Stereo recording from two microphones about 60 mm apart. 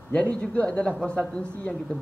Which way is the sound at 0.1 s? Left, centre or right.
Left.